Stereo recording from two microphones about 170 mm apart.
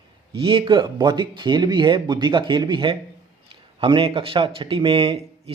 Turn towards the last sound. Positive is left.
turn(degrees=-35)  # may be behind; listen again after turning